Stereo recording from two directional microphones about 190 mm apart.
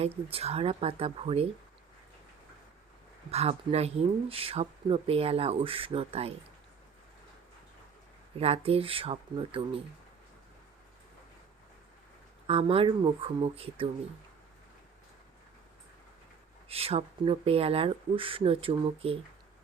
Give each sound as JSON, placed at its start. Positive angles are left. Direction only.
{"t": 0.0, "sound": "speech", "side_deg": -30}
{"t": 3.3, "sound": "speech", "side_deg": -35}
{"t": 8.4, "sound": "speech", "side_deg": -30}
{"t": 12.5, "sound": "speech", "side_deg": -30}
{"t": 16.6, "sound": "speech", "side_deg": -30}